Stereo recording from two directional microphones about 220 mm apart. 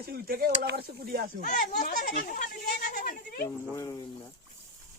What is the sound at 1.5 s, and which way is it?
Speech, 35° left (ahead or behind).